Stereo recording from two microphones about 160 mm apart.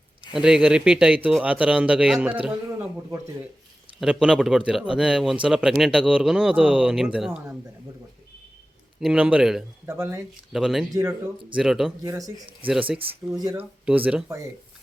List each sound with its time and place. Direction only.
0.3 s speech: 5° right (ahead or behind)
9.0 s speech: 5° right (ahead or behind)
9.8 s speech: 15° right (ahead or behind)
10.5 s speech: centre (ahead or behind)
10.9 s speech: 20° right (ahead or behind)
11.5 s speech: 5° right (ahead or behind)
12.0 s speech: 20° right (ahead or behind)
12.6 s speech: 35° right (ahead or behind)
13.3 s speech: 25° right (ahead or behind)
13.6 s speech: 10° right (ahead or behind)